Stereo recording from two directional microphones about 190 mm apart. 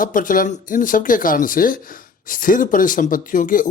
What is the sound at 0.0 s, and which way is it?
Speech, 45° left (ahead or behind).